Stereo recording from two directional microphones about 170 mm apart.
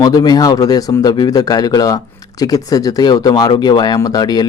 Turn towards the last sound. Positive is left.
turn(degrees=25)  # may be behind; listen again after turning